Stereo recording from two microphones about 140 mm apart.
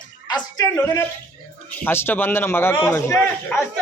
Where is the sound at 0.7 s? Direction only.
15° left (ahead or behind).